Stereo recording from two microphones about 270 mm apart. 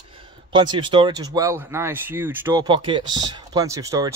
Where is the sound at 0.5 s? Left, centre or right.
Centre.